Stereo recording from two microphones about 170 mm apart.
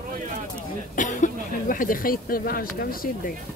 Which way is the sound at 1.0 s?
50° left (ahead or behind).